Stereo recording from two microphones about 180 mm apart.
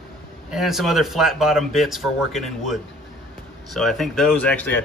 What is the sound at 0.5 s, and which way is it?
Speech, centre (ahead or behind).